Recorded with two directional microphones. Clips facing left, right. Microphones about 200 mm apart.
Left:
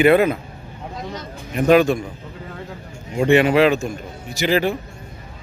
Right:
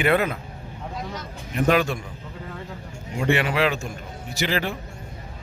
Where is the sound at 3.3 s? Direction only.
20° left (ahead or behind).